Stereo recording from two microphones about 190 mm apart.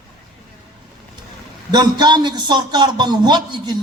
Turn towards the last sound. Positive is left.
turn(degrees=-20)  # may be behind; listen again after turning